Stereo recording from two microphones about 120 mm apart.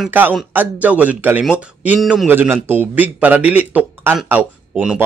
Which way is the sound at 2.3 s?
20° right (ahead or behind).